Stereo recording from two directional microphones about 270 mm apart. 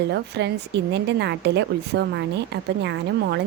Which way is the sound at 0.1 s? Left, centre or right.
Right.